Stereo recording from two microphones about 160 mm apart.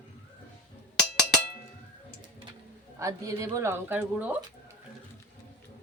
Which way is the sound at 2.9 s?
20° right (ahead or behind).